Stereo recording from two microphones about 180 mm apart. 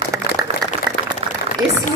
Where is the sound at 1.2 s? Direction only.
35° right (ahead or behind).